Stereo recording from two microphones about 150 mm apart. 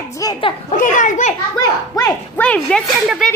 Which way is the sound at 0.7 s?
60° left (ahead or behind).